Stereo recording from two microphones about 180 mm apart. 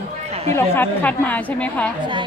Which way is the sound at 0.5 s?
10° left (ahead or behind).